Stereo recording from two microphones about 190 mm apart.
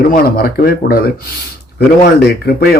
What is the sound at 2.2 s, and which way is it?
Speech, 55° left (ahead or behind).